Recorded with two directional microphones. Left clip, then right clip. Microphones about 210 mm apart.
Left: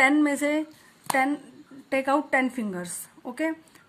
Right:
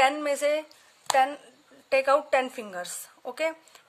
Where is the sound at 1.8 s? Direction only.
30° right (ahead or behind).